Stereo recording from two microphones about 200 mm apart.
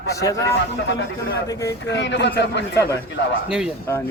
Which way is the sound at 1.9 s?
60° left (ahead or behind).